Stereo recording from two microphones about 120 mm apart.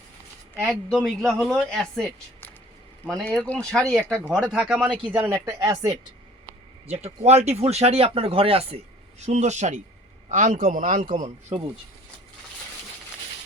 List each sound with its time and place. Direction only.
0.5 s speech: 5° left (ahead or behind)
3.3 s speech: 5° left (ahead or behind)
4.3 s speech: 5° right (ahead or behind)
5.3 s speech: 25° right (ahead or behind)
6.8 s speech: 60° right (ahead or behind)
9.2 s speech: 70° right (ahead or behind)
10.3 s a man's voice: 90° right
11.5 s speech: 60° right (ahead or behind)